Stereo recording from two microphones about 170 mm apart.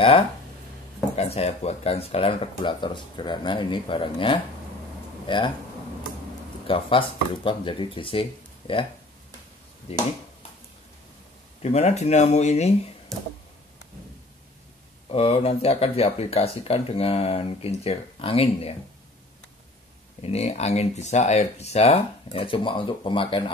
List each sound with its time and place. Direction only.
1.1 s speech: 40° left (ahead or behind)
6.7 s speech: 30° left (ahead or behind)
9.9 s speech: 35° left (ahead or behind)
11.6 s speech: 40° left (ahead or behind)
13.1 s a sound: centre (ahead or behind)
15.0 s speech: 35° left (ahead or behind)
20.2 s speech: 35° left (ahead or behind)